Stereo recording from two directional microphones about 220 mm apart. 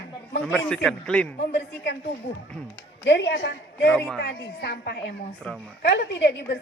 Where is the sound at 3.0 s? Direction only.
55° left (ahead or behind).